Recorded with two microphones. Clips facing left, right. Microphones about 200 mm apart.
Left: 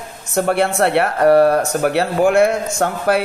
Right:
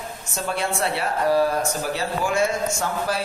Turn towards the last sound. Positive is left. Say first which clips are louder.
# left 8 dB
turn(degrees=60)  # may be behind; listen again after turning